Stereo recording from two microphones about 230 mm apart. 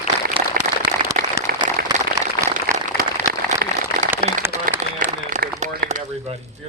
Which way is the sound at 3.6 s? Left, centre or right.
Right.